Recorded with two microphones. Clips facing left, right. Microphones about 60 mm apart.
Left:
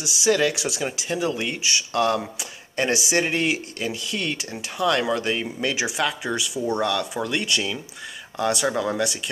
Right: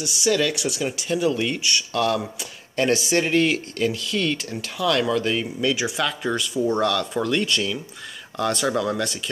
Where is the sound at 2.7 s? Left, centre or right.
Centre.